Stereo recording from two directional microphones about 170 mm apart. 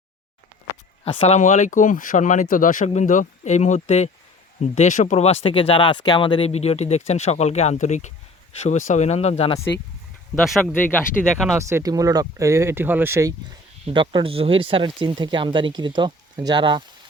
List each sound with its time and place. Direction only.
1.0 s speech: 40° left (ahead or behind)
10.4 s speech: centre (ahead or behind)
10.7 s speech: 10° left (ahead or behind)
11.5 s speech: 20° right (ahead or behind)
13.8 s speech: 30° right (ahead or behind)